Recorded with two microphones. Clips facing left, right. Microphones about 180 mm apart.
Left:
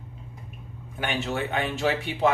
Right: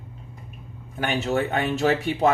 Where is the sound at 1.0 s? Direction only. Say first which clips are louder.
Right 5 dB; 40° right (ahead or behind).